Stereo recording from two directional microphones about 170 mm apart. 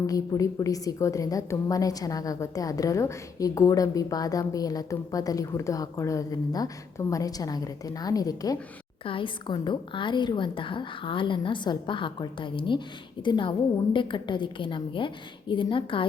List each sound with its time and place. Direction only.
0.1 s a woman's voice: 20° left (ahead or behind)